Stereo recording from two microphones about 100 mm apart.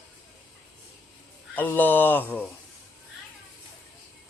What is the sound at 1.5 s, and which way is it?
Speech, 20° left (ahead or behind).